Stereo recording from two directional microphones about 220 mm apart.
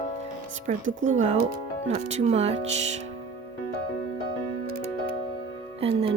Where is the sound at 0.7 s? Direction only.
35° right (ahead or behind).